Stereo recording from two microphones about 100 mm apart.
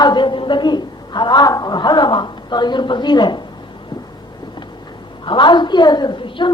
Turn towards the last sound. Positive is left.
turn(degrees=55)  # may be behind; listen again after turning